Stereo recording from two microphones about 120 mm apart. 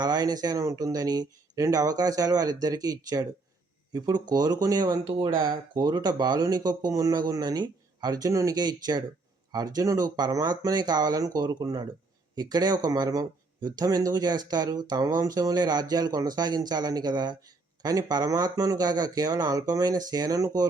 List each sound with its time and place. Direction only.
0.0 s speech: 35° right (ahead or behind)